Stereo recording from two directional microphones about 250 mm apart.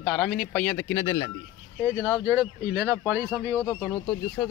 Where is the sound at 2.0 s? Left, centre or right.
Centre.